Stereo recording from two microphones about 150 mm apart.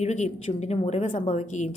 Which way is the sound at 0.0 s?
50° left (ahead or behind).